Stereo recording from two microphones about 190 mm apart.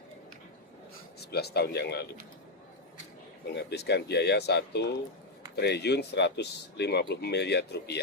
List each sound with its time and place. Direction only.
1.2 s speech: 60° left (ahead or behind)
3.5 s speech: 60° left (ahead or behind)